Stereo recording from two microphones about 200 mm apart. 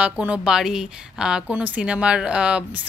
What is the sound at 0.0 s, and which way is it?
Speech, 5° right (ahead or behind).